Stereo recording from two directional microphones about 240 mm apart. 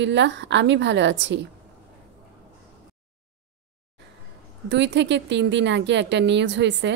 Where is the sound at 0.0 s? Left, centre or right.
Right.